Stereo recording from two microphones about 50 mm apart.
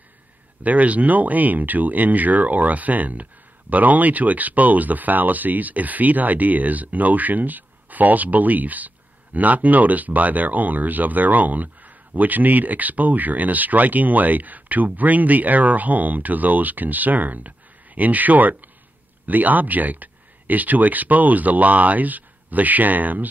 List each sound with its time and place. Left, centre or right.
0.7 s speech: right